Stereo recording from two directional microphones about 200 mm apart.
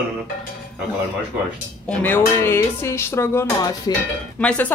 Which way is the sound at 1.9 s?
10° left (ahead or behind).